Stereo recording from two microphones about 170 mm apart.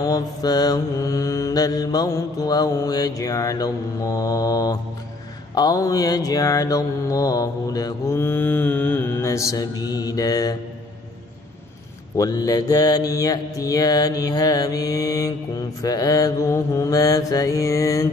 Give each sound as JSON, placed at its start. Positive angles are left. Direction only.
{"t": 0.0, "sound": "mantra", "side_deg": 20}
{"t": 12.2, "sound": "mantra", "side_deg": 20}